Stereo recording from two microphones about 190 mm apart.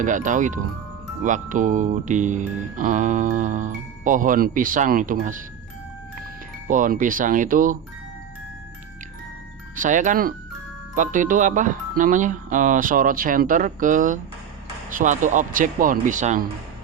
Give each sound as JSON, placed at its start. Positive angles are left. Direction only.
{"t": 0.0, "sound": "speech", "side_deg": -40}
{"t": 6.7, "sound": "speech", "side_deg": -45}
{"t": 9.7, "sound": "speech", "side_deg": -45}